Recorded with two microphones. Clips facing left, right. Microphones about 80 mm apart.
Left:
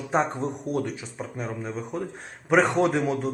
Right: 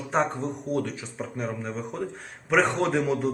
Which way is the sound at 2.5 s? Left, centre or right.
Centre.